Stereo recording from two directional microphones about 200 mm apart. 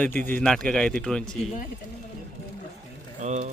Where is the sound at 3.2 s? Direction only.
35° right (ahead or behind).